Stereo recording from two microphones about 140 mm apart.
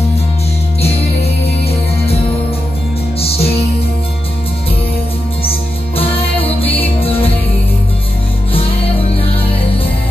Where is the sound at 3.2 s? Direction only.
45° left (ahead or behind).